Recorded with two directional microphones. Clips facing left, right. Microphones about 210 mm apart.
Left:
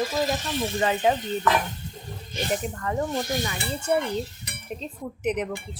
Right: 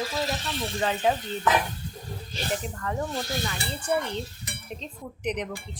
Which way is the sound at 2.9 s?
20° left (ahead or behind).